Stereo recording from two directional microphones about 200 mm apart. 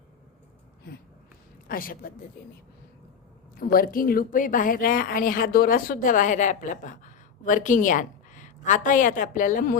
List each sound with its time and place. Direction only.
1.6 s speech: 45° left (ahead or behind)
3.6 s a woman's voice: 45° left (ahead or behind)